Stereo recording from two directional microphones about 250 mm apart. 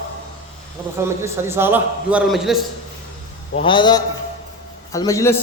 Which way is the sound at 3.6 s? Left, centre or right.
Centre.